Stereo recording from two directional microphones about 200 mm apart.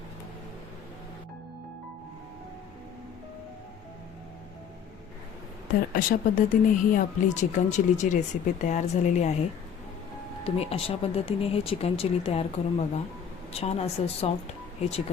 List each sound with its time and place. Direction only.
5.9 s speech: 45° left (ahead or behind)
10.4 s speech: 30° left (ahead or behind)